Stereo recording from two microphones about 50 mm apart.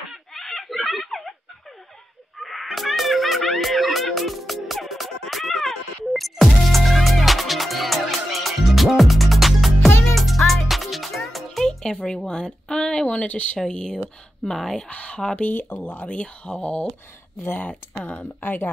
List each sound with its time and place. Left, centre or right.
0.3 s a sound: centre
2.3 s music: centre
13.0 s speech: left
13.6 s speech: centre
14.9 s speech: left
17.4 s speech: left